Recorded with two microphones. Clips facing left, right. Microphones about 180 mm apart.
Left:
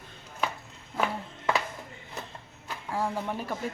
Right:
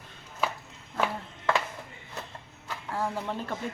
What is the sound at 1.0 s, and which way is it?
Music, 5° left (ahead or behind).